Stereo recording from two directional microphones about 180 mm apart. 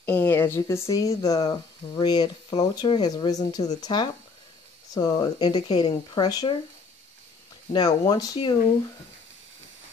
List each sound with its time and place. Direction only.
0.0 s speech: 10° left (ahead or behind)
7.7 s speech: 25° left (ahead or behind)